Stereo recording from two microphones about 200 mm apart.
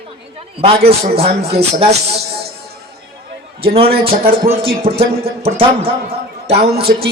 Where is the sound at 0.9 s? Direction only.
30° right (ahead or behind).